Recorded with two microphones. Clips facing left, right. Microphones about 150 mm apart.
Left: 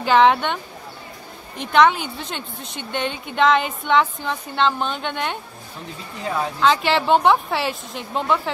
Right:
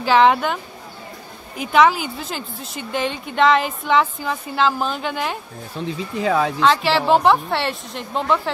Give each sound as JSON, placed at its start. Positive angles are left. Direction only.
{"t": 0.0, "sound": "speech", "side_deg": 0}
{"t": 1.6, "sound": "speech", "side_deg": -5}
{"t": 6.2, "sound": "speech", "side_deg": -90}
{"t": 6.6, "sound": "speech", "side_deg": 0}